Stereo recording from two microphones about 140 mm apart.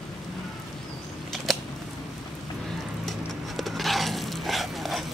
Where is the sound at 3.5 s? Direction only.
Centre (ahead or behind).